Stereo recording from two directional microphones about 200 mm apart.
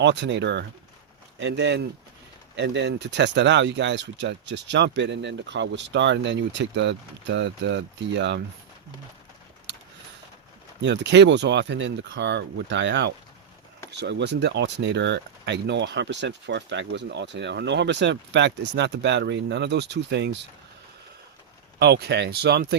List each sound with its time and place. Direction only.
0.0 s speech: 60° right (ahead or behind)
10.8 s speech: 60° right (ahead or behind)
21.8 s speech: 55° right (ahead or behind)